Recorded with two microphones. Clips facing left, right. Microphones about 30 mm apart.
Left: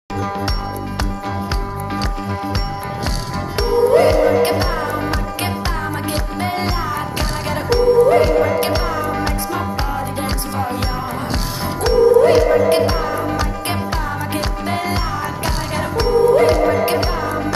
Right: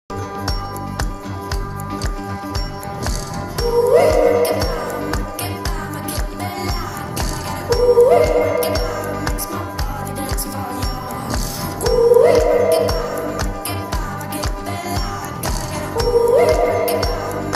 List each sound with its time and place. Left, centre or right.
3.5 s music: left
11.8 s music: left